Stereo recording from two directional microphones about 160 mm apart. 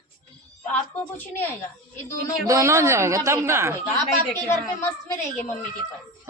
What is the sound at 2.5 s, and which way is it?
Speech, 20° right (ahead or behind).